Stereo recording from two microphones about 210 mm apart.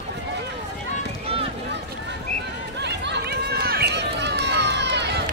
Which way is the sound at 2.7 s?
55° right (ahead or behind).